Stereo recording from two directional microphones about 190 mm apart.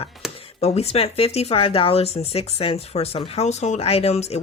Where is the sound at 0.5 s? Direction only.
35° left (ahead or behind).